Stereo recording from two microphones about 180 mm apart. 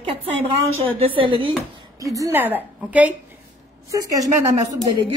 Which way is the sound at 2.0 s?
20° right (ahead or behind).